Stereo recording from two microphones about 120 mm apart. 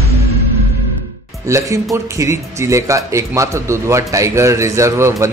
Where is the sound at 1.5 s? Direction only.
25° right (ahead or behind).